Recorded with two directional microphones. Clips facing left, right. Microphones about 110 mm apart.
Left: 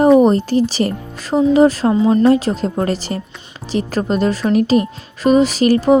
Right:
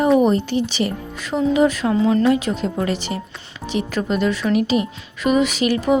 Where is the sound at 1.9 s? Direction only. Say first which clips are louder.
Left 4 dB; 20° left (ahead or behind).